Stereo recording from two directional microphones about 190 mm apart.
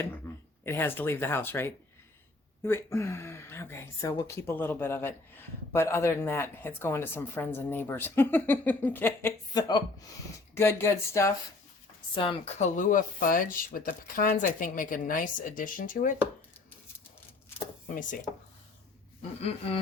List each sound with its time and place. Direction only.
0.6 s speech: 10° left (ahead or behind)
12.1 s speech: 30° left (ahead or behind)
17.9 s speech: 40° left (ahead or behind)
19.4 s a sound: 30° left (ahead or behind)